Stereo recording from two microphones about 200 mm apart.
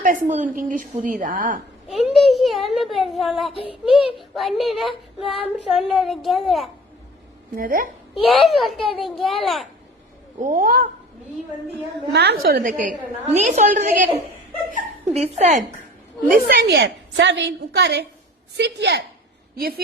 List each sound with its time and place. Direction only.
0.0 s a woman's voice: 40° right (ahead or behind)
1.9 s a child's voice: centre (ahead or behind)
3.5 s child singing: 25° left (ahead or behind)
3.8 s a child's voice: centre (ahead or behind)
7.5 s a woman's voice: 45° right (ahead or behind)
8.1 s a child's voice: centre (ahead or behind)
10.4 s a woman's voice: 40° right (ahead or behind)
12.1 s a woman's voice: 55° right (ahead or behind); by 15.6 s 35° right (ahead or behind)
16.3 s a woman's voice: 45° right (ahead or behind)
19.5 s a woman's voice: 50° right (ahead or behind)